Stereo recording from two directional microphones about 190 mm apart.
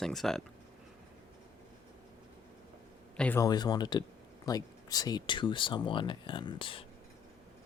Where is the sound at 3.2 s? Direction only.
10° left (ahead or behind).